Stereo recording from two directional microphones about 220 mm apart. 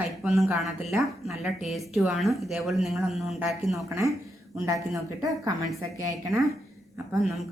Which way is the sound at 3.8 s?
15° right (ahead or behind).